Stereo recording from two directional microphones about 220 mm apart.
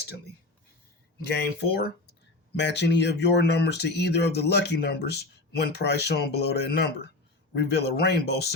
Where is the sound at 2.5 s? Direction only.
50° left (ahead or behind).